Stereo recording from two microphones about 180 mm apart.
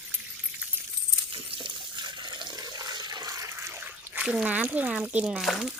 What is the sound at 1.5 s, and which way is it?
Water, 25° right (ahead or behind).